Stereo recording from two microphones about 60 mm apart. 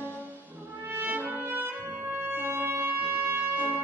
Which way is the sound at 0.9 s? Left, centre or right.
Right.